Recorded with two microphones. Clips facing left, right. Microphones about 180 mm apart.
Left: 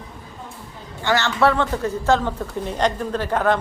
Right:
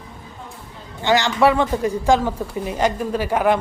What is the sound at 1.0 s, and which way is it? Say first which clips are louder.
Speech: right 2 dB; 15° right (ahead or behind).